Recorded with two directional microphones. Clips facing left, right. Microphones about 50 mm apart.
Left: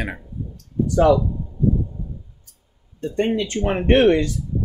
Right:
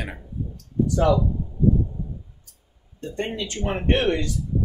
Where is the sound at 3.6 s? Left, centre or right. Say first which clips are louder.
Left 7 dB; left.